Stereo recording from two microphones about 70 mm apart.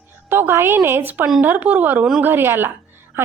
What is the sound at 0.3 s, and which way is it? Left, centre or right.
A woman's voice, right.